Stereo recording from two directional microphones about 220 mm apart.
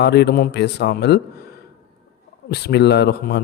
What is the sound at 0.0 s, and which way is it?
Speech, 50° left (ahead or behind).